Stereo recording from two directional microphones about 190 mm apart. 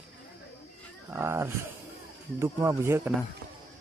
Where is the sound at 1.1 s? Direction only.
15° right (ahead or behind).